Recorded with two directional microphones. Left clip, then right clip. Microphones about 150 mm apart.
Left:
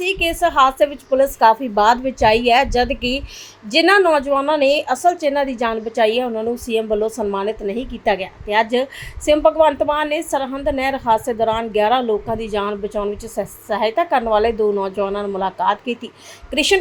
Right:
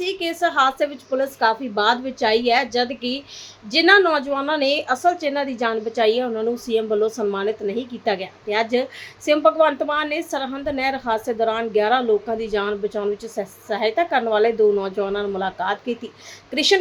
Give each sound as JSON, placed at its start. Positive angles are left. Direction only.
{"t": 0.0, "sound": "a woman's voice", "side_deg": 15}